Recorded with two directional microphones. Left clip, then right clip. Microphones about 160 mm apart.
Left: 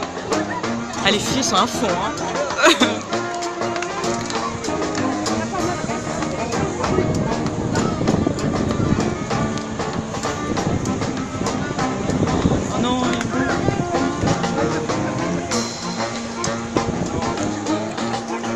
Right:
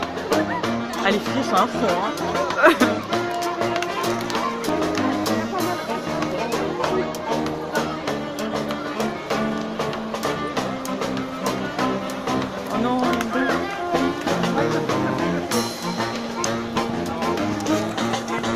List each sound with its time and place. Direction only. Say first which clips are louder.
1.4 s speech: even; 25° left (ahead or behind)
2.6 s speech: left 1 dB; 10° left (ahead or behind)
13.9 s music: right 2 dB; 25° right (ahead or behind)